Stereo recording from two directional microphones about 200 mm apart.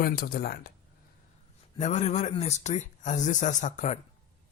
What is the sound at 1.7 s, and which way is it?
Speech, 35° left (ahead or behind).